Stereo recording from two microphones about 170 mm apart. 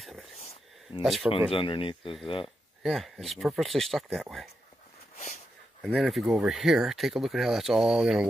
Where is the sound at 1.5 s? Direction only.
30° left (ahead or behind).